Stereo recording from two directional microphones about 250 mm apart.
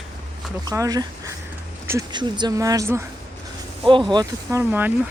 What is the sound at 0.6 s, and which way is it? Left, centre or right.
Speech, centre.